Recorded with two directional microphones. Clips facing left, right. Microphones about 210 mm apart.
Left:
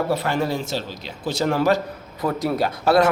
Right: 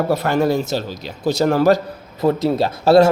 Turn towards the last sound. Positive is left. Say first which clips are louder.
# right 5 dB
turn(degrees=-25)  # may be behind; listen again after turning